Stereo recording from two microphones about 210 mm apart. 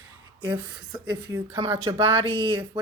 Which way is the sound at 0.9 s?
20° right (ahead or behind).